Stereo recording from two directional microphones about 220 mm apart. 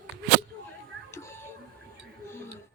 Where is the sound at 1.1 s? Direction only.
10° left (ahead or behind).